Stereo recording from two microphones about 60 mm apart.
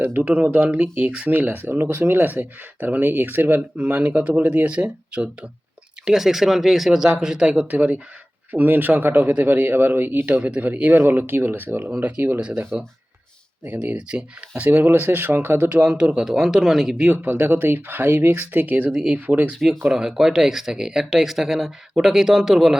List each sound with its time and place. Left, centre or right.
0.0 s speech: right
0.6 s speech: right
6.1 s speech: centre
7.7 s speech: right
10.4 s speech: right
11.9 s speech: right
13.7 s speech: right
14.8 s speech: right
15.8 s speech: centre
17.1 s speech: right
18.9 s speech: centre
19.1 s speech: right
19.5 s speech: centre